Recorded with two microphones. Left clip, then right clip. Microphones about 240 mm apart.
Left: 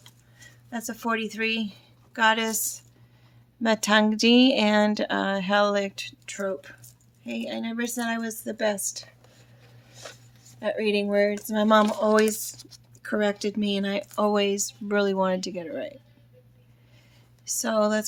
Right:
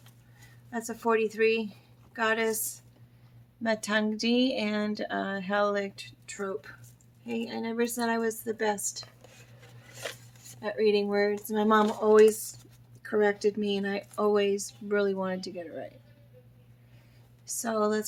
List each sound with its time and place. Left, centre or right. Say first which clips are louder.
0.7 s a woman's voice: right 1 dB; left
3.6 s a woman's voice: left 7 dB; left
10.6 s a woman's voice: left 1 dB; left
17.4 s speech: left 5 dB; left